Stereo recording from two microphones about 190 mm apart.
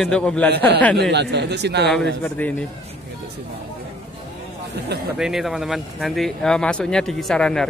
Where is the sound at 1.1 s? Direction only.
65° right (ahead or behind).